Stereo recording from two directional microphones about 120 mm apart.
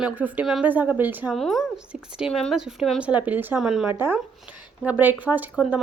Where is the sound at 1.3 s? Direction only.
Centre (ahead or behind); by 3.5 s 15° right (ahead or behind).